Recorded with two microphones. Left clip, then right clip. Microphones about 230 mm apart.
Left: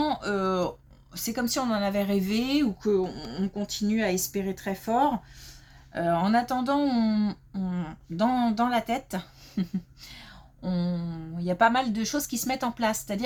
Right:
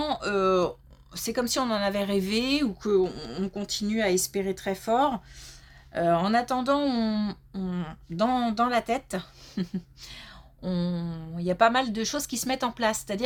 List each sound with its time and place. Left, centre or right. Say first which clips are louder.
0.0 s speech: right 1 dB; right